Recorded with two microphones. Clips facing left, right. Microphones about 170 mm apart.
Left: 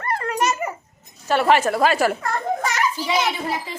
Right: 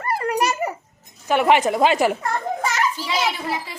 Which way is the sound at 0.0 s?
10° right (ahead or behind).